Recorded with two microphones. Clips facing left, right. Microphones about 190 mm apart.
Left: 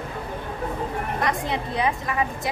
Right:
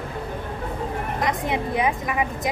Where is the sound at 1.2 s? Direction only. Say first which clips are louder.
Right 3 dB; 20° right (ahead or behind).